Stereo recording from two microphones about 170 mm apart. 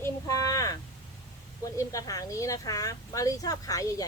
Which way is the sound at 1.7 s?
20° left (ahead or behind).